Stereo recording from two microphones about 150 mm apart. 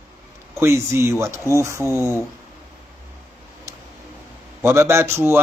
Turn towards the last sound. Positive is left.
turn(degrees=-15)  # may be behind; listen again after turning